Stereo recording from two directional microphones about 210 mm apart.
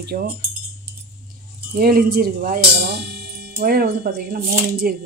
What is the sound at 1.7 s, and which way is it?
Speech, 45° right (ahead or behind).